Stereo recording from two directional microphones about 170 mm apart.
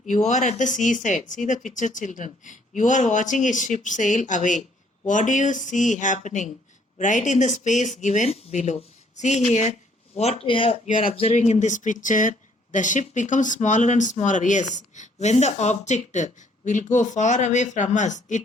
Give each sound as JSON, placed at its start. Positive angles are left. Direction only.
{"t": 0.0, "sound": "speech", "side_deg": 45}